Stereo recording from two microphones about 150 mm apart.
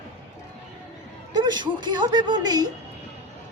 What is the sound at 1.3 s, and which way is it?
A man's voice, 30° right (ahead or behind).